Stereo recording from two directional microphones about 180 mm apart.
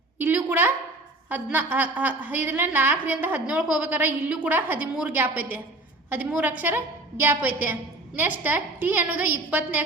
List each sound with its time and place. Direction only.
0.2 s a woman's voice: 10° right (ahead or behind)